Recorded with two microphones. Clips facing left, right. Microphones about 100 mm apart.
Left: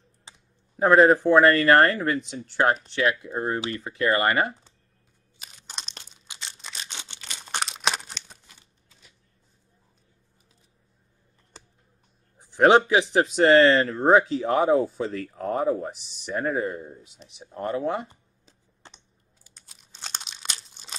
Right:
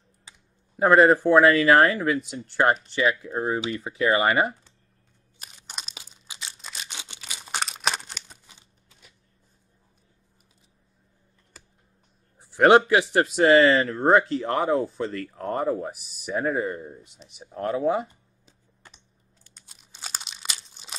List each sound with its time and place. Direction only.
0.3 s computer keyboard: 30° left (ahead or behind)
0.7 s speech: centre (ahead or behind)
5.4 s crunch: 5° right (ahead or behind)
12.4 s speech: 5° right (ahead or behind)
18.8 s typing: 25° left (ahead or behind)
19.4 s crunch: centre (ahead or behind)